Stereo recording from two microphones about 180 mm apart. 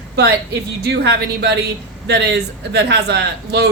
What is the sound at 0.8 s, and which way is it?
Speech, 65° right (ahead or behind).